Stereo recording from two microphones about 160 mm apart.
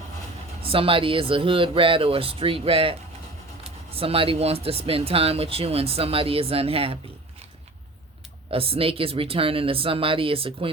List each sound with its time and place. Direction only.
0.6 s speech: 35° right (ahead or behind)
3.9 s speech: 35° right (ahead or behind)
8.4 s speech: 35° right (ahead or behind)